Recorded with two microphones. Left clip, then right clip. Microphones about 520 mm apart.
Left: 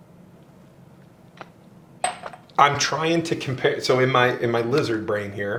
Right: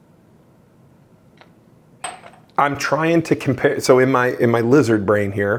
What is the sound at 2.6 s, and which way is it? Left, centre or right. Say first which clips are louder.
Speech: right 1 dB; right.